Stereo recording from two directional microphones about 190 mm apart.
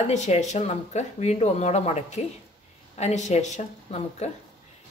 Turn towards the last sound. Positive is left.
turn(degrees=35)  # may be behind; listen again after turning